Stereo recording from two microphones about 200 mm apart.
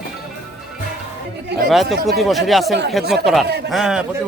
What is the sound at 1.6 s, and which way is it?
A man's voice, centre (ahead or behind).